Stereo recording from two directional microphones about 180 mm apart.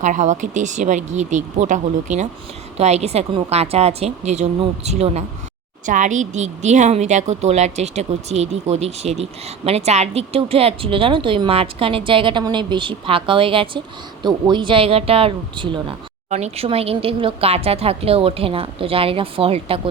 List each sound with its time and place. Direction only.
0.0 s a woman's voice: 40° right (ahead or behind)